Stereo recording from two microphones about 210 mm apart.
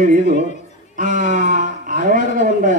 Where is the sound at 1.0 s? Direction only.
40° right (ahead or behind).